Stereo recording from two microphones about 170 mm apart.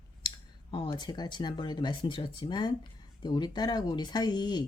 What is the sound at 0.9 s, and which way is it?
Speech, 25° left (ahead or behind).